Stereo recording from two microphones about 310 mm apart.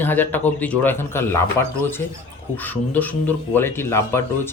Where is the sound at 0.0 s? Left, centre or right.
Centre.